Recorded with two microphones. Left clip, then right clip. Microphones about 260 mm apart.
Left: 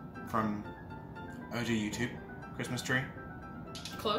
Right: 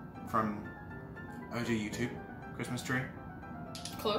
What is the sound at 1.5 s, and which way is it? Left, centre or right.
Speech, centre.